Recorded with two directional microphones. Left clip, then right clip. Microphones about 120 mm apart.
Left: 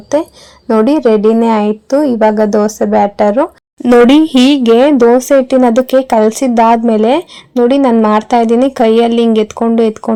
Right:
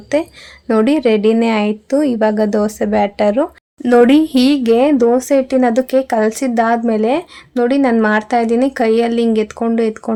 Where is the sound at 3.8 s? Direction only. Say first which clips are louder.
Left 4 dB; 45° left (ahead or behind).